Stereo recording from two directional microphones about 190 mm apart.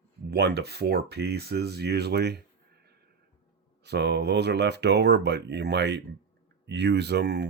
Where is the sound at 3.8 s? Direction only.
65° right (ahead or behind).